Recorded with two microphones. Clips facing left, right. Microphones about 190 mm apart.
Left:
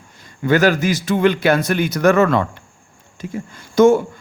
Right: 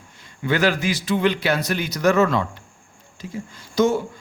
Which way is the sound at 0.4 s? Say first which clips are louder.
Left 5 dB; 45° left (ahead or behind).